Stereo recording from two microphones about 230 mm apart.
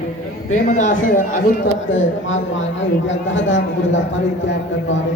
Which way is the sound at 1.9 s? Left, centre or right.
Left.